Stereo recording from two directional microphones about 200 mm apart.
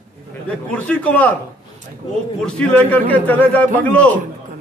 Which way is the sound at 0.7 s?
5° left (ahead or behind).